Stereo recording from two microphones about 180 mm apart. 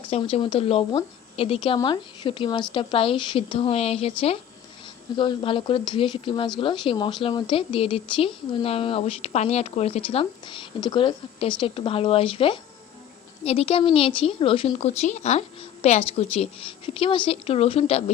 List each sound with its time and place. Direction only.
0.1 s a woman's voice: 30° left (ahead or behind)